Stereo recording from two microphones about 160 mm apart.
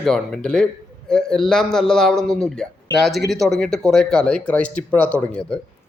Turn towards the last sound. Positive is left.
turn(degrees=5)  # may be behind; listen again after turning